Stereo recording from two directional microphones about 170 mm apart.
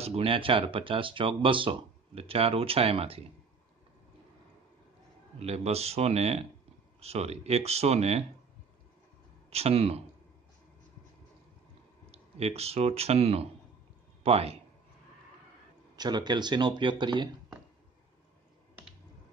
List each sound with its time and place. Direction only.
0.0 s speech: 35° right (ahead or behind)
5.4 s speech: 35° right (ahead or behind)
9.5 s speech: 35° right (ahead or behind)
12.1 s speech: 35° right (ahead or behind)
16.0 s speech: 25° right (ahead or behind)